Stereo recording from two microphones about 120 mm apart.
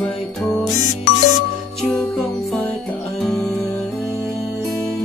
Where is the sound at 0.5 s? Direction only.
30° left (ahead or behind).